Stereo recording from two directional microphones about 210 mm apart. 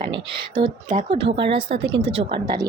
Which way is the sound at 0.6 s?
25° right (ahead or behind).